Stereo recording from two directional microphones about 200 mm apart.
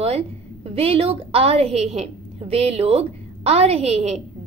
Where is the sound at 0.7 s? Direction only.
30° right (ahead or behind).